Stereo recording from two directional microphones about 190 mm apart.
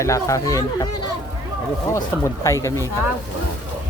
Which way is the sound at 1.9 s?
15° left (ahead or behind).